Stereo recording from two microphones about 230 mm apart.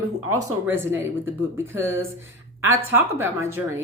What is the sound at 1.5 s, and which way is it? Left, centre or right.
Speech, centre.